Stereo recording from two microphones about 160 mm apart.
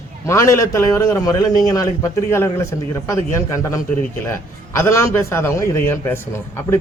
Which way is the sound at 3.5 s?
20° left (ahead or behind).